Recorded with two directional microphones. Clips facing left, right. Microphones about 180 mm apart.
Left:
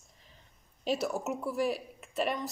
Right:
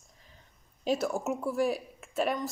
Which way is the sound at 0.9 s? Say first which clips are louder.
Right 2 dB; centre (ahead or behind).